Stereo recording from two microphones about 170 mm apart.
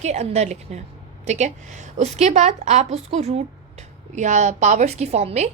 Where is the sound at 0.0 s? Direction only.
40° right (ahead or behind).